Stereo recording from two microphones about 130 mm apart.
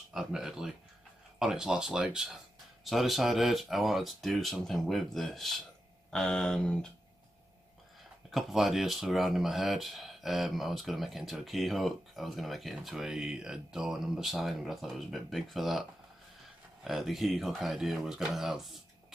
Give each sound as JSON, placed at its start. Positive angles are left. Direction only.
{"t": 0.1, "sound": "speech", "side_deg": -5}
{"t": 8.3, "sound": "speech", "side_deg": 0}
{"t": 16.8, "sound": "speech", "side_deg": 0}